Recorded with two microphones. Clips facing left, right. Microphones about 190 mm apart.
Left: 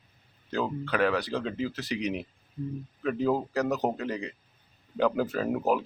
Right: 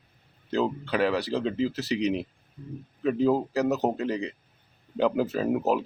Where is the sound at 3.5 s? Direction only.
5° right (ahead or behind).